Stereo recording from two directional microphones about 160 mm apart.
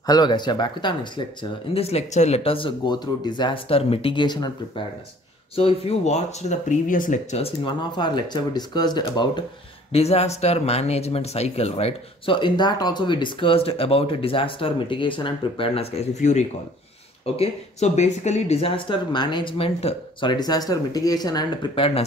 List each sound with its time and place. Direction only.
0.0 s speech: 25° left (ahead or behind)
5.6 s speech: 40° left (ahead or behind)
8.0 s speech: 25° left (ahead or behind)
9.9 s speech: 40° left (ahead or behind)